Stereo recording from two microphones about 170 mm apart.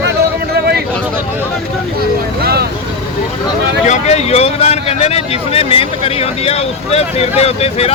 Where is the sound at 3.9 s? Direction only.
40° left (ahead or behind).